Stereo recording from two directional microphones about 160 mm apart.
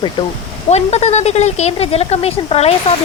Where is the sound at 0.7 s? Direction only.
45° left (ahead or behind).